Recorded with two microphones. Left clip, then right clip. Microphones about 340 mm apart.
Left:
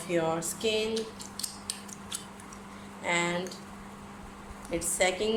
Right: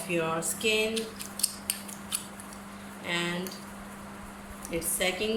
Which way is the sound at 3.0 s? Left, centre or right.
Left.